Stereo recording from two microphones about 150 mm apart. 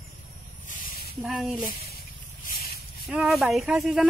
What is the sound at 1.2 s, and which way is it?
Speech, centre (ahead or behind).